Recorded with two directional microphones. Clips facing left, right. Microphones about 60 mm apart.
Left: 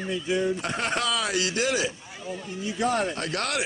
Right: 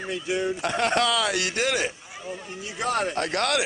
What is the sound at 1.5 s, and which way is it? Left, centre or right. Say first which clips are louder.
Speech: even; right.